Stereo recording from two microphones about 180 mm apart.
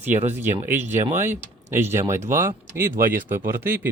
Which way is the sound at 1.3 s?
15° right (ahead or behind).